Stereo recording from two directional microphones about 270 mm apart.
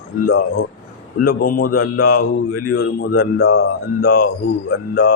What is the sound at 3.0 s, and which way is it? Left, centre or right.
Speech, left.